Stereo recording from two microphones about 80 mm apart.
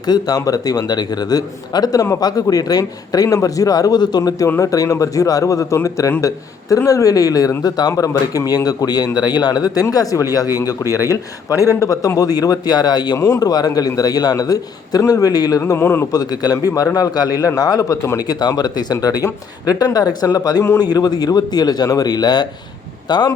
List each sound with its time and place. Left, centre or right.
0.0 s a man's voice: left
4.6 s a man's voice: left
13.1 s speech: left
13.4 s a man's voice: left
15.8 s speech: left
16.1 s a man's voice: left
18.2 s speech: left
18.9 s a man's voice: left